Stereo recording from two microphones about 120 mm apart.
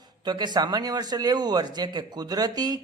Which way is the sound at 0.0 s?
35° right (ahead or behind).